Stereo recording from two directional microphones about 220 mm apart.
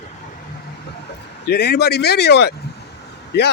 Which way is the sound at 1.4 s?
50° left (ahead or behind).